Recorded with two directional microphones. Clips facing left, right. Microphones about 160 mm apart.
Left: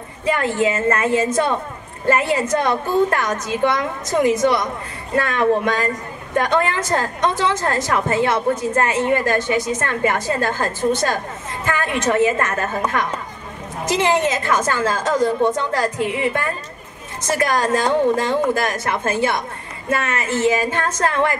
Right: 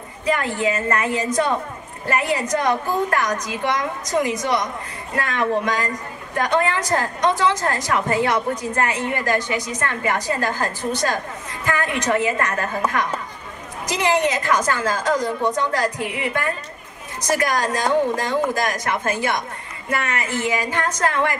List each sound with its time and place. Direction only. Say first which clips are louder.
0.2 s a woman's voice: left 3 dB; 25° left (ahead or behind)
17.3 s a woman's voice: left 2 dB; 25° left (ahead or behind)